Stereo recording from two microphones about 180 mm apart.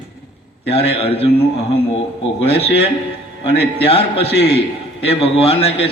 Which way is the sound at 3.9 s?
30° left (ahead or behind).